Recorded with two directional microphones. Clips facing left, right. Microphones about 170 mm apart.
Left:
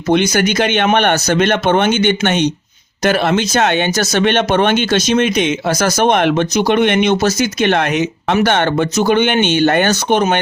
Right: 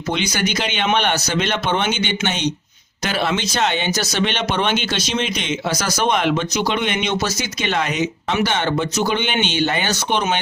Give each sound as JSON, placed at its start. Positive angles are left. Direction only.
{"t": 0.1, "sound": "speech", "side_deg": 50}